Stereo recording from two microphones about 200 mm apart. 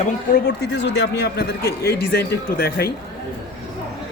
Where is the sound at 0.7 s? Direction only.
60° left (ahead or behind).